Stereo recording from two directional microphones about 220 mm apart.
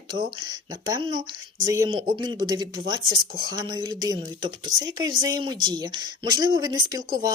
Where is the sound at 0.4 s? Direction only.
20° right (ahead or behind).